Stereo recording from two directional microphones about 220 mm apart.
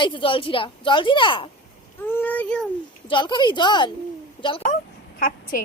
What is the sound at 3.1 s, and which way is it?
Speech, 20° left (ahead or behind).